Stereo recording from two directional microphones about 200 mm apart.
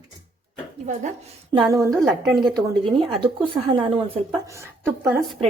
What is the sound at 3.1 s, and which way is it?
A woman's voice, 25° right (ahead or behind).